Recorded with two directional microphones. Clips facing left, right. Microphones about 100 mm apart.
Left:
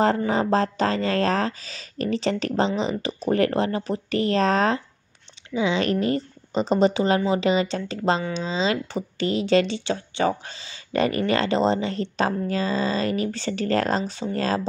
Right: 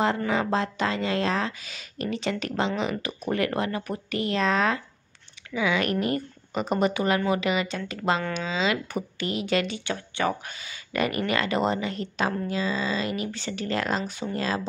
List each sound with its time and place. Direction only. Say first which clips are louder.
0.3 s a woman's voice: left 4 dB; 35° left (ahead or behind)